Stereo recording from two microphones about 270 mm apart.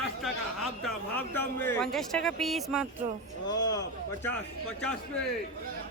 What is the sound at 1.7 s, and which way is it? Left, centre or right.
Speech, centre.